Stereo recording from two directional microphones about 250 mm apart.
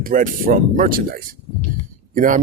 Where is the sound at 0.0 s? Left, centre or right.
Right.